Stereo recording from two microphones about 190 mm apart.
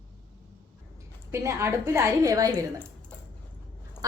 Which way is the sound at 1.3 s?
15° right (ahead or behind).